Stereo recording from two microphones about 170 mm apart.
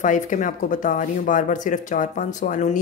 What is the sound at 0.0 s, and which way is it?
Speech, 50° left (ahead or behind).